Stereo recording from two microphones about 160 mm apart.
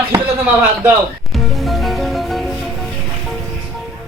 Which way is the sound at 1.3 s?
Centre (ahead or behind).